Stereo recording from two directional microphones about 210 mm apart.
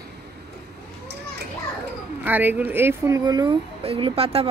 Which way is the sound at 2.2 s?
10° right (ahead or behind).